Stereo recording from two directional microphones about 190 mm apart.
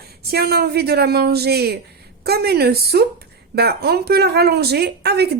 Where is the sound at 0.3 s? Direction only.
55° right (ahead or behind).